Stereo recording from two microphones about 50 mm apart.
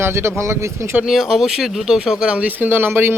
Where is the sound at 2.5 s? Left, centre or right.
Right.